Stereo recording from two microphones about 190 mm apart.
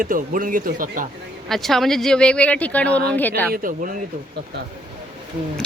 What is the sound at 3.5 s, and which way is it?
Speech, 45° right (ahead or behind).